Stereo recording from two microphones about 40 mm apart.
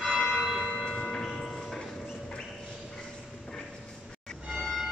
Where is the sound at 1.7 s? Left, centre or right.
Centre.